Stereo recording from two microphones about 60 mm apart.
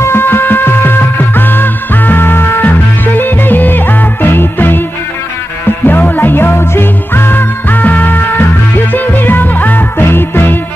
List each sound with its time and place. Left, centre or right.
0.0 s music: left
5.9 s music: left